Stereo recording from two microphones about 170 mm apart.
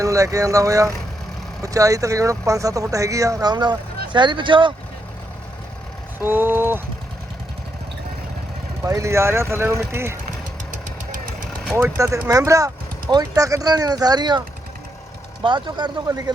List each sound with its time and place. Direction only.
0.0 s speech: 20° right (ahead or behind)
6.1 s vehicle: 10° right (ahead or behind)
8.8 s speech: 20° right (ahead or behind)
11.8 s speech: 15° right (ahead or behind)
15.4 s speech: 25° right (ahead or behind)